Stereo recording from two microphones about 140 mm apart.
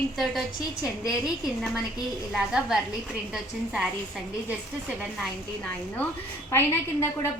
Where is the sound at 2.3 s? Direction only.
5° right (ahead or behind).